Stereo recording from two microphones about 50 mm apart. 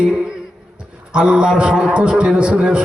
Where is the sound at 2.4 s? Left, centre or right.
Right.